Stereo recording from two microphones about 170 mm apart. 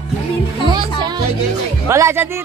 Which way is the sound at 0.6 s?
25° right (ahead or behind).